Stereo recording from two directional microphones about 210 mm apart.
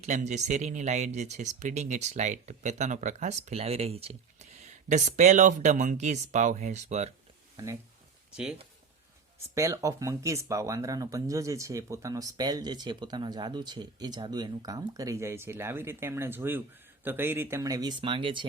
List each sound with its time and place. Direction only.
0.0 s speech: 35° right (ahead or behind)
7.5 s speech: 15° right (ahead or behind)
8.3 s speech: 5° right (ahead or behind)
9.6 s speech: 15° right (ahead or behind)